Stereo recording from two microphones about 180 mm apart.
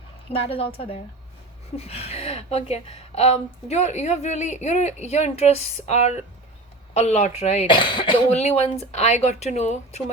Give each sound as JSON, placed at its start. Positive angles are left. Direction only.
{"t": 0.3, "sound": "a woman's voice", "side_deg": 30}